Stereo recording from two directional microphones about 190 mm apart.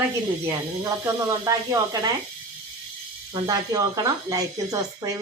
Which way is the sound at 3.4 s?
20° right (ahead or behind).